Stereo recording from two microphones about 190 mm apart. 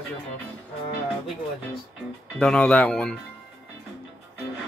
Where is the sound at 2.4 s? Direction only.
5° left (ahead or behind).